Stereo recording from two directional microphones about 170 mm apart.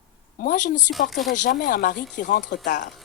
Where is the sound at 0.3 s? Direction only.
50° left (ahead or behind).